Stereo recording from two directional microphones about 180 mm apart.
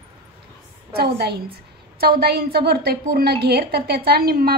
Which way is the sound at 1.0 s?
60° right (ahead or behind).